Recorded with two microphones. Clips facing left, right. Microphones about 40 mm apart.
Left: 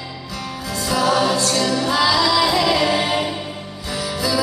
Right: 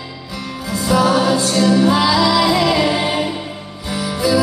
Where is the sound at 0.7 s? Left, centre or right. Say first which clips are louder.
Right 4 dB; centre.